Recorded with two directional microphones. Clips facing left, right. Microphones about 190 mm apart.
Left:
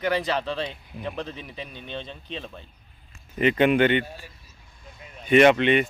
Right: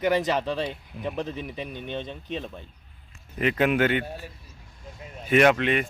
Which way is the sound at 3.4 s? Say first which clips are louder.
Left 3 dB; centre (ahead or behind).